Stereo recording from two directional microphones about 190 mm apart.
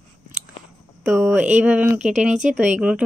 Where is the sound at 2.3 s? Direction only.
40° right (ahead or behind).